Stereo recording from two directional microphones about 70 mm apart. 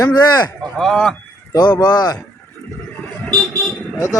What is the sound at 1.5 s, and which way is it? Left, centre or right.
Speech, left.